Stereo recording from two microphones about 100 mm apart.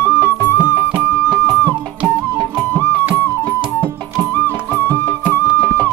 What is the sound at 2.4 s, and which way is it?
Music, 20° left (ahead or behind).